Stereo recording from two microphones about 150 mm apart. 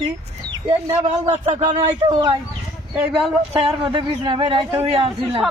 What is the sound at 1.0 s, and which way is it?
A man's voice, 50° right (ahead or behind).